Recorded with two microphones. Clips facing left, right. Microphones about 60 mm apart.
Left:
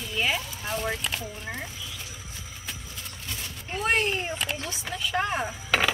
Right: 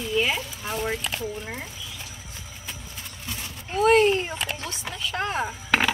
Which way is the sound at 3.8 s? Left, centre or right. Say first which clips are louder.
Right 8 dB; centre.